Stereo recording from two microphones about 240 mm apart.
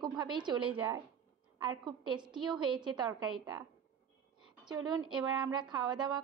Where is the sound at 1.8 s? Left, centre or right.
Centre.